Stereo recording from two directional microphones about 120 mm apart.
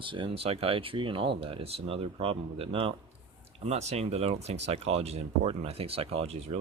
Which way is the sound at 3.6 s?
65° right (ahead or behind).